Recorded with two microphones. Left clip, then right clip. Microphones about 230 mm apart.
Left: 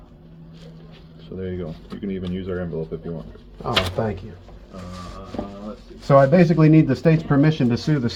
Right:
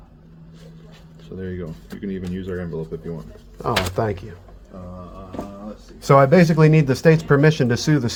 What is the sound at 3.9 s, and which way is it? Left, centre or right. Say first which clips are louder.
Speech: right 2 dB; right.